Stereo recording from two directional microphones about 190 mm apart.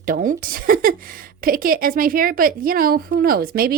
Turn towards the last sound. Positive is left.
turn(degrees=-50)  # may be behind; listen again after turning